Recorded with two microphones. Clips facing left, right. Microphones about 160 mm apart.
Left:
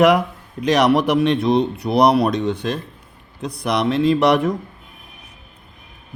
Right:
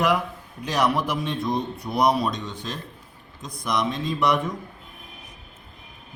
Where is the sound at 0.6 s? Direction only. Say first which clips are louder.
Left 8 dB; 75° left (ahead or behind).